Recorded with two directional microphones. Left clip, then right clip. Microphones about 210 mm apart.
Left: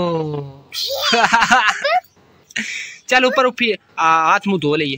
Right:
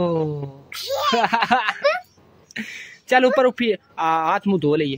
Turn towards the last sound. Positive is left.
turn(degrees=-5)  # may be behind; listen again after turning